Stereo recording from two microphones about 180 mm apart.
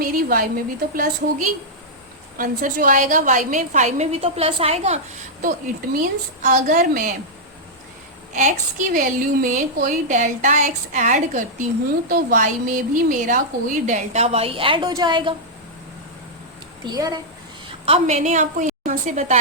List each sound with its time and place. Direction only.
0.0 s a woman's voice: 50° right (ahead or behind); by 4.9 s 35° right (ahead or behind)
6.0 s a woman's voice: 45° right (ahead or behind)
8.3 s a woman's voice: 45° right (ahead or behind); by 15.4 s 25° right (ahead or behind)
16.8 s a woman's voice: 20° right (ahead or behind)
17.8 s a woman's voice: 35° right (ahead or behind)